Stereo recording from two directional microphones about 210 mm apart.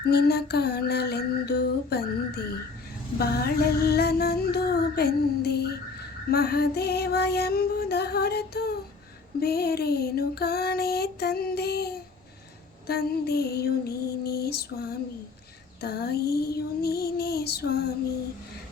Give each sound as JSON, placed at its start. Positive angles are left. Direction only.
{"t": 0.0, "sound": "female singing", "side_deg": 50}